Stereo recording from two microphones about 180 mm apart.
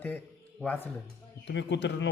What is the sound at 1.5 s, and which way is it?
Speech, 80° left.